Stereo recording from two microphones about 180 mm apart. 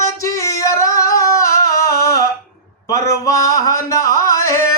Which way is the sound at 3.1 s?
15° left (ahead or behind).